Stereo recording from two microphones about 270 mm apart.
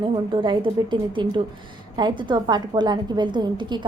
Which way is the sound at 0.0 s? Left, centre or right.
Centre.